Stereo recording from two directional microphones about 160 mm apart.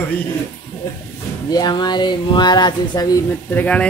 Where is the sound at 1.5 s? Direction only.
25° left (ahead or behind).